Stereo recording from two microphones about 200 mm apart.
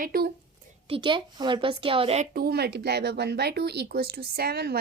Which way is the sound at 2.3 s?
50° right (ahead or behind).